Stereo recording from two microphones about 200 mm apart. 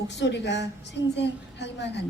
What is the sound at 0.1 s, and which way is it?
Speech, 60° left (ahead or behind).